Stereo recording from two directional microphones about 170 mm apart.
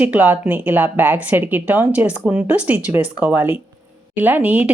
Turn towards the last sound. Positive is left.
turn(degrees=-10)  # may be behind; listen again after turning